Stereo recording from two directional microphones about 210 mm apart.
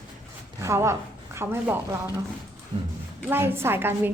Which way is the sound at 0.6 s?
15° right (ahead or behind).